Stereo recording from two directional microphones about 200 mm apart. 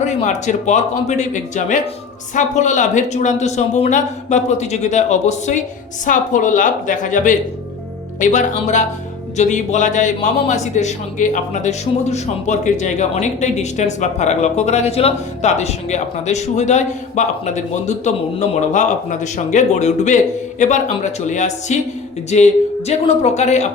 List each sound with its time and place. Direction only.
0.0 s a man's voice: 35° left (ahead or behind)